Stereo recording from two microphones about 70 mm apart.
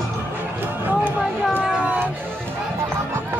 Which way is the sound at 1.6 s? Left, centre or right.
Centre.